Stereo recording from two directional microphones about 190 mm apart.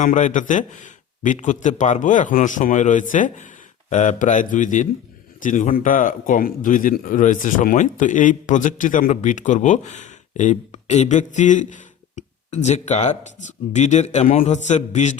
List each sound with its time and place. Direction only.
0.0 s a man's voice: 40° left (ahead or behind)